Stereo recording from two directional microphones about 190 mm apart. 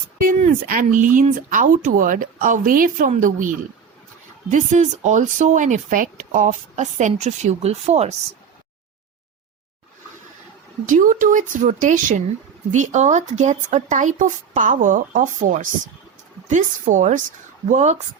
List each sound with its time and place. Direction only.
0.2 s speech: 45° right (ahead or behind)
4.5 s speech: 40° right (ahead or behind)
10.8 s speech: 45° right (ahead or behind)